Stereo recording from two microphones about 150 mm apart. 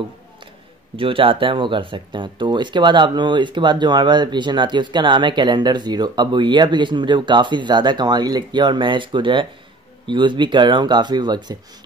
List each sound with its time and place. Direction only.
0.9 s speech: 35° right (ahead or behind)